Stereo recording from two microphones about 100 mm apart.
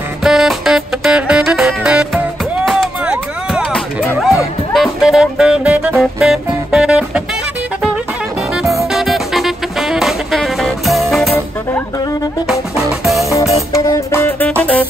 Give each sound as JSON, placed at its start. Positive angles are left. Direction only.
{"t": 0.2, "sound": "music", "side_deg": -5}
{"t": 2.6, "sound": "chop", "side_deg": 0}
{"t": 3.7, "sound": "music", "side_deg": 20}
{"t": 4.7, "sound": "music", "side_deg": 0}
{"t": 8.9, "sound": "music", "side_deg": 0}
{"t": 13.0, "sound": "music", "side_deg": 0}
{"t": 13.8, "sound": "music", "side_deg": 25}